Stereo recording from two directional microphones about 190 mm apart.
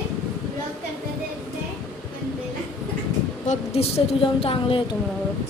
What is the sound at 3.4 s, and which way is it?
A woman's voice, 30° left (ahead or behind).